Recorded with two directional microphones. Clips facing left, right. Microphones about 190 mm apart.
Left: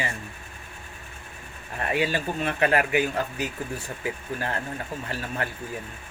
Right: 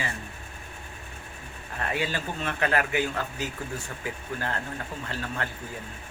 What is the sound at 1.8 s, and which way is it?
Speech, 15° left (ahead or behind).